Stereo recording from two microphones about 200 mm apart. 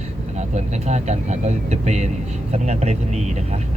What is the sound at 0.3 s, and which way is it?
Speech, 35° right (ahead or behind).